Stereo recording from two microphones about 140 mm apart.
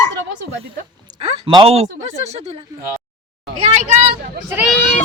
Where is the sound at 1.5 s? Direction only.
45° right (ahead or behind).